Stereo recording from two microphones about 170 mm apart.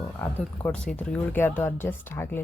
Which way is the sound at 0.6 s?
5° left (ahead or behind).